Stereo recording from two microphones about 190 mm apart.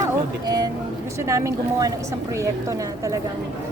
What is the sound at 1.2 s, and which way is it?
Speech, 15° right (ahead or behind).